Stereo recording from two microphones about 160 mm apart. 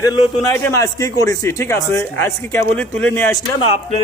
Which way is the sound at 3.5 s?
35° left (ahead or behind).